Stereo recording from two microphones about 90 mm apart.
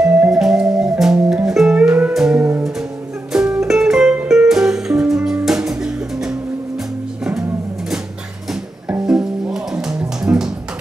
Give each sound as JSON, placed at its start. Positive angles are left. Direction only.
{"t": 0.3, "sound": "music", "side_deg": -5}
{"t": 1.8, "sound": "music", "side_deg": -15}
{"t": 2.1, "sound": "music", "side_deg": -5}
{"t": 9.0, "sound": "music", "side_deg": -5}